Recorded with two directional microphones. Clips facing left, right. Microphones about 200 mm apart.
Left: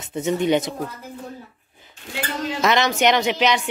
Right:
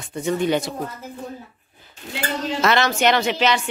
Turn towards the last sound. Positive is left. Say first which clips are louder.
# even
turn(degrees=15)  # may be behind; listen again after turning